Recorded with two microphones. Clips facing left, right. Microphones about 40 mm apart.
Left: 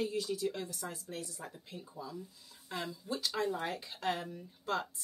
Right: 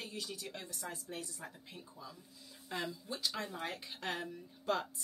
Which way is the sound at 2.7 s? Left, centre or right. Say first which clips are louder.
Left 2 dB; centre.